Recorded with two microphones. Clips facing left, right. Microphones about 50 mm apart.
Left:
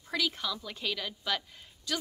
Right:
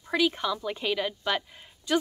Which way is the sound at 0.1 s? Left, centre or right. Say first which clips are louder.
Right 7 dB; right.